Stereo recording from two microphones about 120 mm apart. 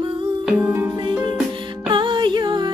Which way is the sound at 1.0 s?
40° right (ahead or behind).